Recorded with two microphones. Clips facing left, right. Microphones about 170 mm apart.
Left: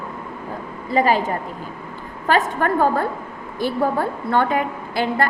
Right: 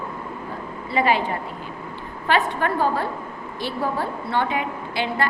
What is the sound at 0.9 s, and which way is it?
A woman's voice, 40° left (ahead or behind).